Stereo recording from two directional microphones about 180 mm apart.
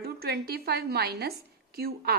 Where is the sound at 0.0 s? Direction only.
60° right (ahead or behind).